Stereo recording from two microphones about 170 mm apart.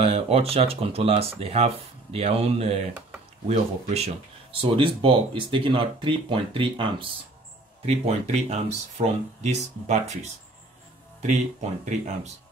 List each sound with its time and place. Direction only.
0.0 s speech: 35° right (ahead or behind)